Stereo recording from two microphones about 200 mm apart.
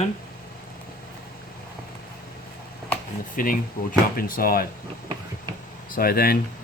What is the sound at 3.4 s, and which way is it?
Speech, 45° left (ahead or behind).